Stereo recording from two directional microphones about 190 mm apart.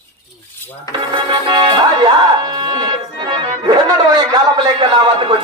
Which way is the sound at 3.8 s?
20° right (ahead or behind).